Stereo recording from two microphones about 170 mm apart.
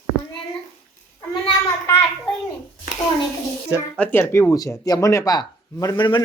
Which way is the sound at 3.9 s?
15° left (ahead or behind).